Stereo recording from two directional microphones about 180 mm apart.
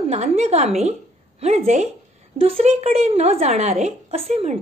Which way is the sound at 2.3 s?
35° right (ahead or behind).